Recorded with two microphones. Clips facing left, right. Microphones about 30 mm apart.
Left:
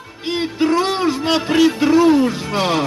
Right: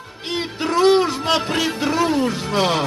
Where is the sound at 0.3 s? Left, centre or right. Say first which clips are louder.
Left 5 dB; centre.